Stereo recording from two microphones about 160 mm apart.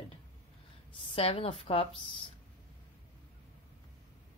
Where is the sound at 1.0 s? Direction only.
35° left (ahead or behind).